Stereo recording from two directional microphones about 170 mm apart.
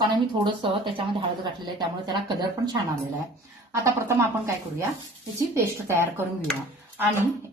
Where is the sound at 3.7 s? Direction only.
15° right (ahead or behind).